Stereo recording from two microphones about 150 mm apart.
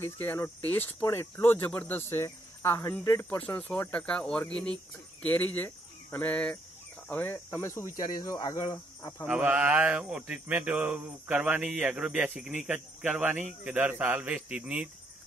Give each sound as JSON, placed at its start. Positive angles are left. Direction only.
{"t": 0.0, "sound": "speech", "side_deg": 15}
{"t": 9.2, "sound": "speech", "side_deg": -10}